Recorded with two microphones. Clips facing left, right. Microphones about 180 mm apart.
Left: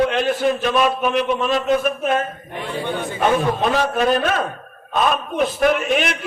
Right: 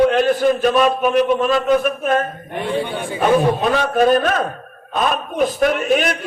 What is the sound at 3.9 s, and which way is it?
A man's voice, 45° right (ahead or behind).